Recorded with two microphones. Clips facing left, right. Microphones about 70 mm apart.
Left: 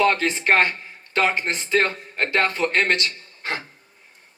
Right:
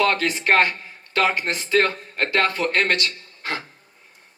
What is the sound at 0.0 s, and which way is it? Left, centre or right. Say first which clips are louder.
Speech: left 1 dB; left.